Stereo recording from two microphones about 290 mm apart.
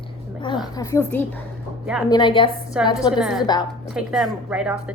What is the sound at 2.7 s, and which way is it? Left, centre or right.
Speech, centre.